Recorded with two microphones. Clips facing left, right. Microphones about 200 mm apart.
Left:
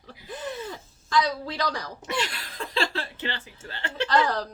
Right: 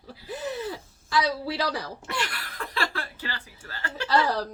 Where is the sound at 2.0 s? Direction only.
20° left (ahead or behind).